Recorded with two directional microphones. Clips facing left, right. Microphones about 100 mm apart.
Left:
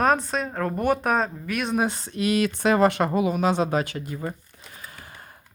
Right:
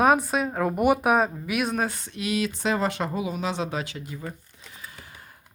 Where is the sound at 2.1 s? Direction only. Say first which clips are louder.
Left 6 dB; 50° left (ahead or behind).